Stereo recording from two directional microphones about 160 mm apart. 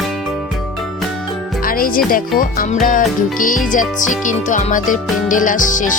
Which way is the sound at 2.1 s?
60° left (ahead or behind).